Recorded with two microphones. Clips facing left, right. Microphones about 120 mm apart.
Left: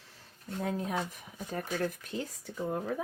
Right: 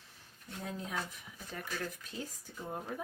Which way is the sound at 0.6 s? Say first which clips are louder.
Left 7 dB; 60° left (ahead or behind).